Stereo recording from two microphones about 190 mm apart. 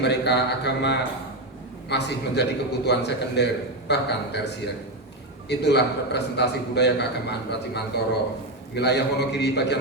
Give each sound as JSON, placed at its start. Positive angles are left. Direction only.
{"t": 0.0, "sound": "a man's voice", "side_deg": 60}